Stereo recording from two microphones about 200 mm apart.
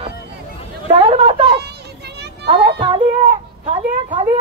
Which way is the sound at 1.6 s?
55° right (ahead or behind).